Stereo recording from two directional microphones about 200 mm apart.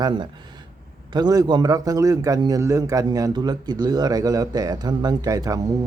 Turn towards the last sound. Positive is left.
turn(degrees=-15)  # may be behind; listen again after turning